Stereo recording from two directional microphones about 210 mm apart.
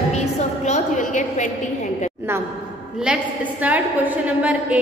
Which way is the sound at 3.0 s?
5° right (ahead or behind).